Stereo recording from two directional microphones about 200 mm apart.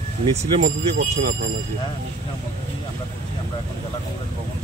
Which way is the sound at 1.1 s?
45° right (ahead or behind).